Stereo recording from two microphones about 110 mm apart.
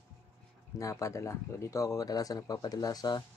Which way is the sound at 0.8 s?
30° left (ahead or behind).